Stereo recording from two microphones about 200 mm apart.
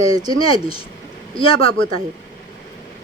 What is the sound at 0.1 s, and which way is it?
Speech, 20° right (ahead or behind).